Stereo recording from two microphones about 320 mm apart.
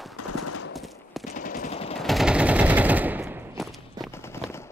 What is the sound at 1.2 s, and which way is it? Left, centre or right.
Machine gun, left.